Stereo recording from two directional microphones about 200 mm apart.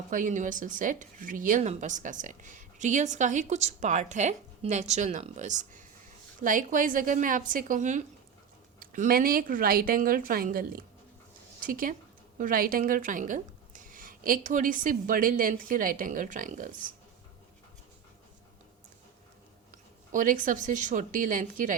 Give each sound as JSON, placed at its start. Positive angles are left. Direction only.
{"t": 0.1, "sound": "speech", "side_deg": -40}
{"t": 20.1, "sound": "speech", "side_deg": -40}